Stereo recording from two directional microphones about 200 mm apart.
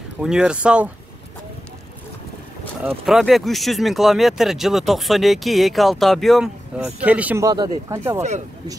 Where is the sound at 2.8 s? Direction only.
Centre (ahead or behind).